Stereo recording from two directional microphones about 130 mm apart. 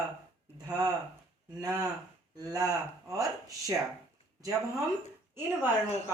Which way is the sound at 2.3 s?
30° right (ahead or behind).